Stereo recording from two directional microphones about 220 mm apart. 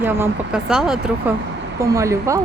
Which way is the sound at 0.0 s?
5° right (ahead or behind).